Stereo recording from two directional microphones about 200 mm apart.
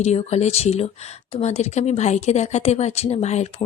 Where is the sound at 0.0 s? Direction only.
30° left (ahead or behind).